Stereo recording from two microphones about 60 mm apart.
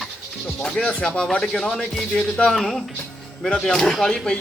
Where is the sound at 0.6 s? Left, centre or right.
Centre.